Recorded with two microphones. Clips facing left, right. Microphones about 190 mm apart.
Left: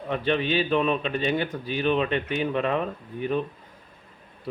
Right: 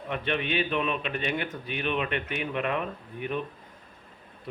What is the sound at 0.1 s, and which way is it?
A man's voice, 30° left (ahead or behind).